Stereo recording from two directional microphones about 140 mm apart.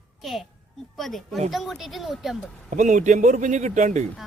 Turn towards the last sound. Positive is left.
turn(degrees=-60)  # may be behind; listen again after turning